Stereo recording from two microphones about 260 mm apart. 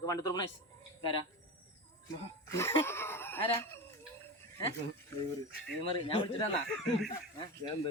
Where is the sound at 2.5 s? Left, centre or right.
Centre.